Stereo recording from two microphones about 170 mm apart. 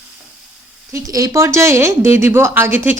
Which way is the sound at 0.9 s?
20° right (ahead or behind).